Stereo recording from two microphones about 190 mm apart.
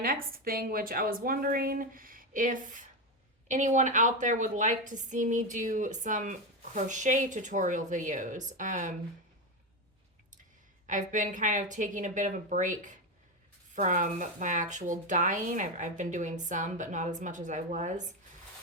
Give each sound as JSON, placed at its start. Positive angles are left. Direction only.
{"t": 0.0, "sound": "a woman's voice", "side_deg": -50}
{"t": 10.8, "sound": "a woman's voice", "side_deg": -40}